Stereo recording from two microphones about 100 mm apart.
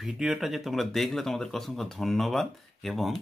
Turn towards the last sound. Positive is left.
turn(degrees=0)  # may be behind; listen again after turning